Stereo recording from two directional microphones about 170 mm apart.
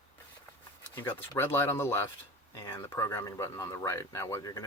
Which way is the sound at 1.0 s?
15° left (ahead or behind).